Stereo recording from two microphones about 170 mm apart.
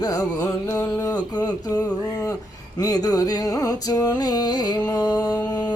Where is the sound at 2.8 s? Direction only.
20° left (ahead or behind).